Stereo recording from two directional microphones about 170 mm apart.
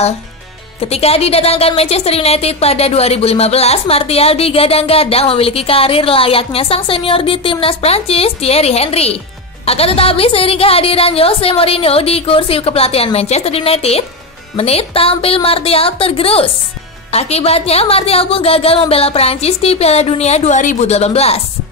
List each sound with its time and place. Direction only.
0.7 s speech: 35° left (ahead or behind)